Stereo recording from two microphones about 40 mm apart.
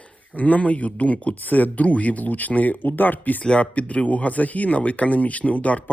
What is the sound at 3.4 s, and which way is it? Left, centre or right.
Speech, left.